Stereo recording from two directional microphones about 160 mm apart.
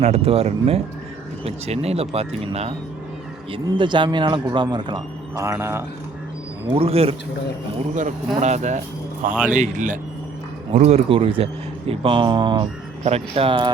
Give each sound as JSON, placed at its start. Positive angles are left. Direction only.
{"t": 0.0, "sound": "speech", "side_deg": -40}
{"t": 6.7, "sound": "speech", "side_deg": -35}
{"t": 7.9, "sound": "speech", "side_deg": -50}
{"t": 10.8, "sound": "speech", "side_deg": -40}
{"t": 13.1, "sound": "speech", "side_deg": -40}